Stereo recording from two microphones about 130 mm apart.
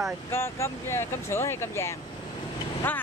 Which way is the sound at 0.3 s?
20° left (ahead or behind).